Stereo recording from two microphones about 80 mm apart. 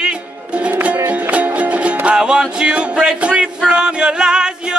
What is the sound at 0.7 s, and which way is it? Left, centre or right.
Music, centre.